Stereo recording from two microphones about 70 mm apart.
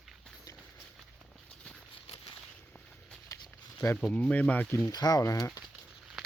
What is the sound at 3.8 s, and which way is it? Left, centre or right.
Speech, left.